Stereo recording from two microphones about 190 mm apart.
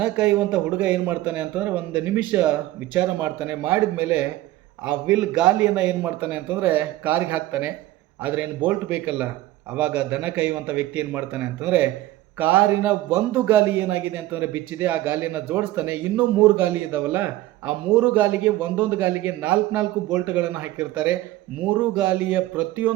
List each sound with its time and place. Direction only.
0.0 s a man's voice: 10° right (ahead or behind)